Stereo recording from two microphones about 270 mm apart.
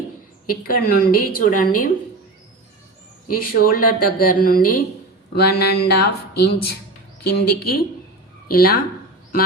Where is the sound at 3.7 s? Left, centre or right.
Left.